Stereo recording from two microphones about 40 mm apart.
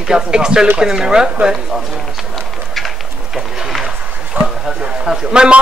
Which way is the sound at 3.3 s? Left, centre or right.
Centre.